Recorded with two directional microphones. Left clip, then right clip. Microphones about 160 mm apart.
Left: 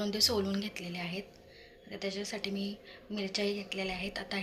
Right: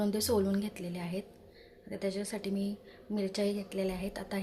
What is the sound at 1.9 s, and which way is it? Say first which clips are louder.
Speech: right 1 dB; 90° right.